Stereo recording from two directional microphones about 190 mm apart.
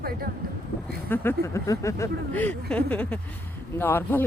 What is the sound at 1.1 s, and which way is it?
Speech, 15° left (ahead or behind).